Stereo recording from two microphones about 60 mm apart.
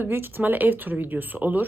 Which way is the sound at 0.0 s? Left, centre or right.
Right.